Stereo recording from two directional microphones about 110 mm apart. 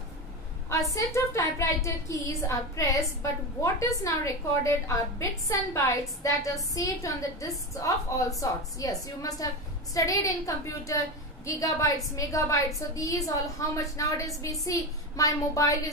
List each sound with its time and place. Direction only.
0.9 s a woman's voice: 30° left (ahead or behind)